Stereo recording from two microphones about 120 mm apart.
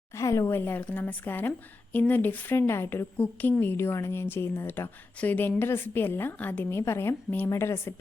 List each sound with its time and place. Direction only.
0.1 s a woman's voice: 25° left (ahead or behind)